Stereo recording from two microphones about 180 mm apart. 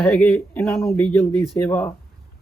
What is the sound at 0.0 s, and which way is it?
Speech, 5° left (ahead or behind).